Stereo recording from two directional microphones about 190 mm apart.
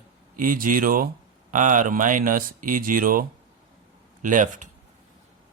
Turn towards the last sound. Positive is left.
turn(degrees=-40)  # may be behind; listen again after turning